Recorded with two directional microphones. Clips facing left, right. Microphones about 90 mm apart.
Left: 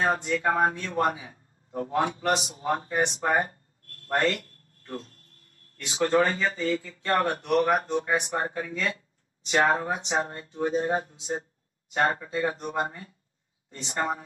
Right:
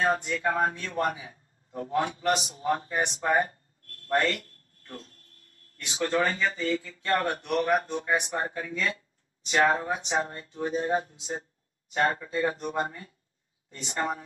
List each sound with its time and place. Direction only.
0.0 s a man's voice: 30° left (ahead or behind)